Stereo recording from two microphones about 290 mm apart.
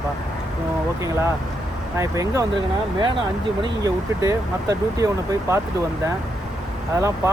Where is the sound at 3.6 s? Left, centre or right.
Centre.